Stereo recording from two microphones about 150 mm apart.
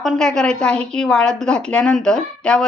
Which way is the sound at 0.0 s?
Centre (ahead or behind).